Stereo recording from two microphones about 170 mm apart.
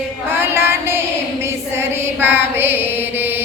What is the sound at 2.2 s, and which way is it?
Mantra, 10° right (ahead or behind).